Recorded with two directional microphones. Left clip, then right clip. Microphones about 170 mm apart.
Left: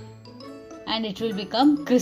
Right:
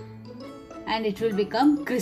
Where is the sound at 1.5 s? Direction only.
25° left (ahead or behind).